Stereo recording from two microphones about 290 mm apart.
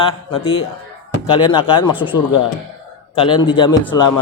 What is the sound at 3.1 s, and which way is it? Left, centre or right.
Speech, centre.